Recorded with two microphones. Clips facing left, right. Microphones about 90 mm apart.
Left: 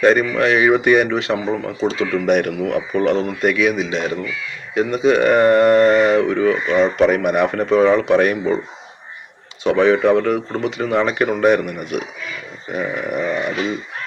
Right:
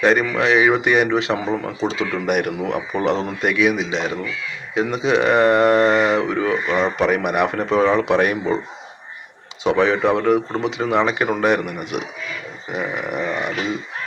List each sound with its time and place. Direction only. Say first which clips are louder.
0.0 s speech: left 2 dB; 15° right (ahead or behind)
6.4 s speech: left 3 dB; 30° right (ahead or behind)
6.7 s speech: left 4 dB; 15° right (ahead or behind)
9.6 s speech: left 3 dB; 20° right (ahead or behind)